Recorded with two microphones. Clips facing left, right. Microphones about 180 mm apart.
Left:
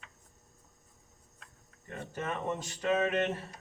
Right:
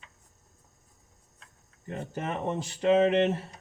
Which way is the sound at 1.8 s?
25° right (ahead or behind).